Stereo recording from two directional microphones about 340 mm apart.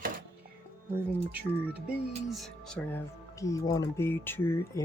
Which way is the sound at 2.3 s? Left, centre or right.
Centre.